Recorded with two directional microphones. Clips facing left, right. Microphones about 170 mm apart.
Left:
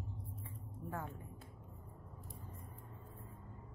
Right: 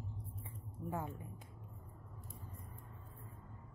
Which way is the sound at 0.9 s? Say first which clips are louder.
Right 3 dB; 10° right (ahead or behind).